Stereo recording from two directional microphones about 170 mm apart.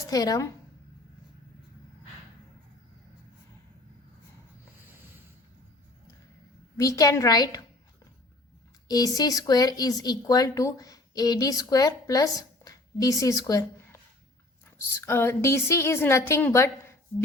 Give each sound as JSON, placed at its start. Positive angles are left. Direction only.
{"t": 0.0, "sound": "speech", "side_deg": 20}
{"t": 6.7, "sound": "speech", "side_deg": 20}
{"t": 8.9, "sound": "speech", "side_deg": 20}
{"t": 15.0, "sound": "a woman's voice", "side_deg": 15}